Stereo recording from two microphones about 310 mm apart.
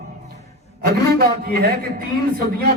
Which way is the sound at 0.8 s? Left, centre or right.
Right.